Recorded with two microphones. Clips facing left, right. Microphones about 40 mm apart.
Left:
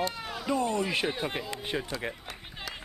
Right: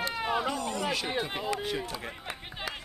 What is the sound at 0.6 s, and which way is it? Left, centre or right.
Speech, left.